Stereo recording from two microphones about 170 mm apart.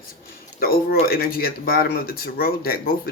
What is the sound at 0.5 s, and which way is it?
Speech, 60° left (ahead or behind).